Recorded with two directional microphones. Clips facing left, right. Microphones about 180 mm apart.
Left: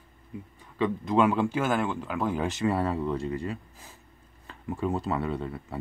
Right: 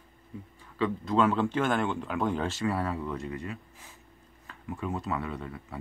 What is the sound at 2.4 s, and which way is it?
Speech, 20° left (ahead or behind).